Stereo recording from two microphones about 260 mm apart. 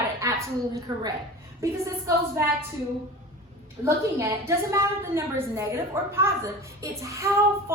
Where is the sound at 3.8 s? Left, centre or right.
Centre.